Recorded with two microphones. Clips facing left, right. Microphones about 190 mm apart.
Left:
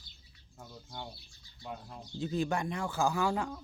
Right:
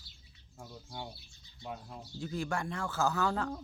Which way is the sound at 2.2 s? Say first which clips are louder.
Left 4 dB; 20° left (ahead or behind).